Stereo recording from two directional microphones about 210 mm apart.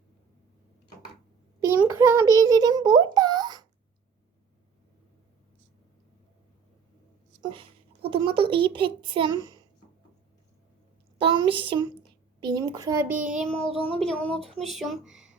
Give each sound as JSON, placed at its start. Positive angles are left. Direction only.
{"t": 1.6, "sound": "a sound", "side_deg": -15}
{"t": 8.1, "sound": "a child's voice", "side_deg": -25}
{"t": 11.2, "sound": "a child's voice", "side_deg": -25}